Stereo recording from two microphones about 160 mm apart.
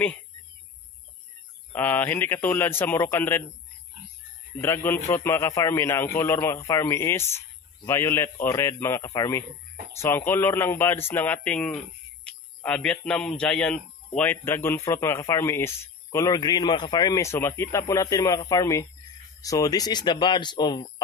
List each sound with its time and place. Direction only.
1.7 s a man's voice: 10° left (ahead or behind)
4.6 s a man's voice: 15° left (ahead or behind)